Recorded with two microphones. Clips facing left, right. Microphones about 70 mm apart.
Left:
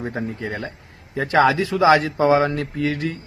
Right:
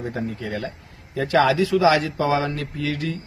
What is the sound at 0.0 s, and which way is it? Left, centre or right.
A man's voice, left.